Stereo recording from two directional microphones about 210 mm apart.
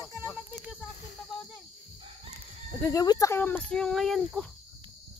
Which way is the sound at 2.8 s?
15° left (ahead or behind).